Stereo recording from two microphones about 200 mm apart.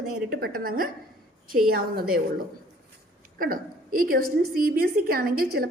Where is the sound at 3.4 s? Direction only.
45° right (ahead or behind).